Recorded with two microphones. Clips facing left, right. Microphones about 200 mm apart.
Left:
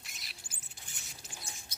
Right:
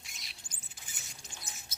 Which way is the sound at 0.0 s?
Centre (ahead or behind).